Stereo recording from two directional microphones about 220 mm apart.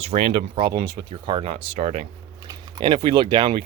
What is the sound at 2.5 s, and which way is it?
Speech, 20° right (ahead or behind).